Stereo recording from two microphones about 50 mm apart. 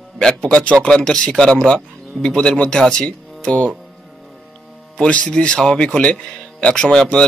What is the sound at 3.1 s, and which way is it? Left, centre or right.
Speech, left.